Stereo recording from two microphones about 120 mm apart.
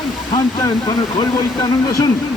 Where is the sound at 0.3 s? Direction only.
30° left (ahead or behind).